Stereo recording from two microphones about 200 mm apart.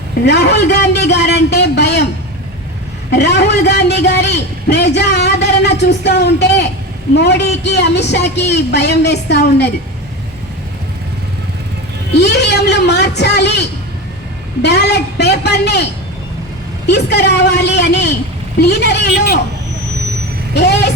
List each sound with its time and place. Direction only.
0.3 s a man's voice: 55° left (ahead or behind)
3.1 s a man's voice: 55° left (ahead or behind)
12.1 s speech: 55° left (ahead or behind)
14.6 s speech: 55° left (ahead or behind)
20.5 s speech: 55° left (ahead or behind)